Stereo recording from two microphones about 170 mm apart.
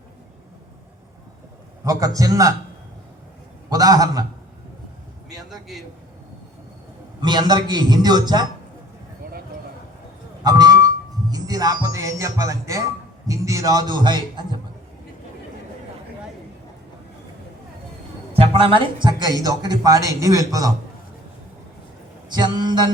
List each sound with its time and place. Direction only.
1.8 s speech: 20° right (ahead or behind)
3.7 s a man's voice: 20° right (ahead or behind)
5.5 s a man's voice: centre (ahead or behind)
7.2 s speech: 25° right (ahead or behind)
10.4 s music: 25° right (ahead or behind)
11.3 s speech: 20° right (ahead or behind)
18.3 s speech: 35° right (ahead or behind)
22.3 s a man's voice: 25° right (ahead or behind)